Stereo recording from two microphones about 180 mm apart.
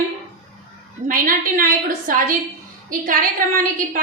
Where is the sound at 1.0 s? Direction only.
50° right (ahead or behind).